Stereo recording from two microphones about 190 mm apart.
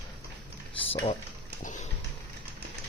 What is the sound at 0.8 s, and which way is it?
Speech, 30° left (ahead or behind).